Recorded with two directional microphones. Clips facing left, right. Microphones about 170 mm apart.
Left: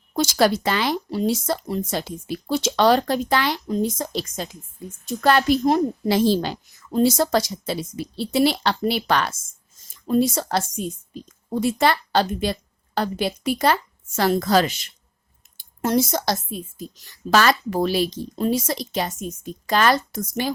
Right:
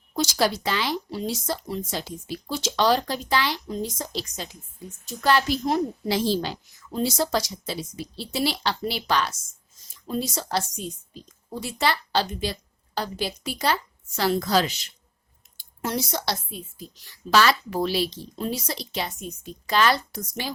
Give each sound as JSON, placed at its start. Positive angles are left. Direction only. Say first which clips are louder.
{"t": 0.2, "sound": "speech", "louder": "left 5 dB", "side_deg": 55}